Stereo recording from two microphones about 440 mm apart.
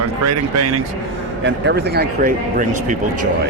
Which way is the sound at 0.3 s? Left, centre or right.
Right.